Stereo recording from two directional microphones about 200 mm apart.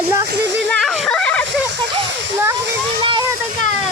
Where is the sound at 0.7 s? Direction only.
Centre (ahead or behind).